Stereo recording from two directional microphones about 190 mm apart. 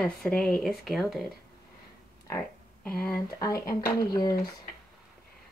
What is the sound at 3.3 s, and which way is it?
Speech, 20° left (ahead or behind).